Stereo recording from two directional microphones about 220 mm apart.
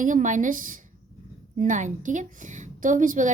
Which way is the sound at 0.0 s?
35° right (ahead or behind).